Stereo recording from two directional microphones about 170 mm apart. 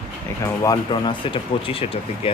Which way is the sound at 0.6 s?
30° left (ahead or behind).